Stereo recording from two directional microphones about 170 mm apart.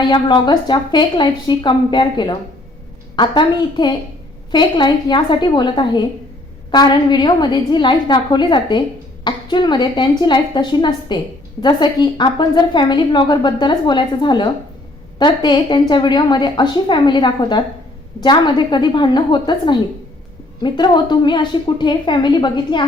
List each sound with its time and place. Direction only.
0.0 s a woman's voice: 25° left (ahead or behind)